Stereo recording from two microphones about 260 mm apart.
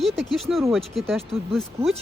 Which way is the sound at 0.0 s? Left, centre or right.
Centre.